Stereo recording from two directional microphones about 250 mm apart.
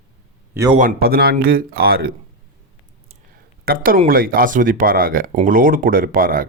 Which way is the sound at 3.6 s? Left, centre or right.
Right.